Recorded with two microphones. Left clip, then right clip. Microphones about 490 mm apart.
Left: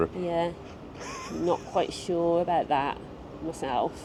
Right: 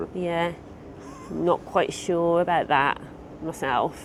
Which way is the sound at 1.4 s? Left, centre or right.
Right.